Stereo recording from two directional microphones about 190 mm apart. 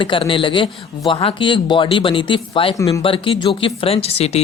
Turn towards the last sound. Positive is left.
turn(degrees=35)  # may be behind; listen again after turning